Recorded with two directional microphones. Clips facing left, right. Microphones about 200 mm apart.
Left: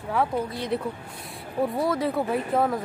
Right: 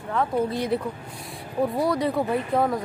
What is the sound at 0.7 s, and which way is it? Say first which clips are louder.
Speech: right 2 dB; centre (ahead or behind).